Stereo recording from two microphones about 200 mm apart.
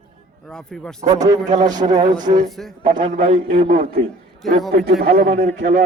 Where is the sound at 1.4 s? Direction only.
40° right (ahead or behind).